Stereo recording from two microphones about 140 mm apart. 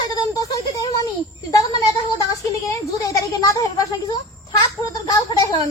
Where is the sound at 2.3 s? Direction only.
25° left (ahead or behind).